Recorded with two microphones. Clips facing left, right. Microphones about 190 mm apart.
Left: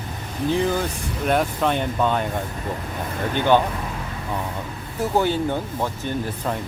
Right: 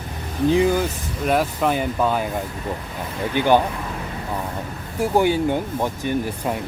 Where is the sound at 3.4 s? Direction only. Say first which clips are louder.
Right 1 dB; 10° right (ahead or behind).